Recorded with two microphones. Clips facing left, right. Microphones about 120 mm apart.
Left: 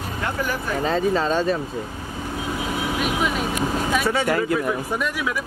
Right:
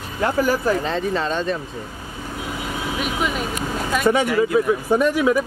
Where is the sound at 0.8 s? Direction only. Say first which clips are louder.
Left 2 dB; 5° left (ahead or behind).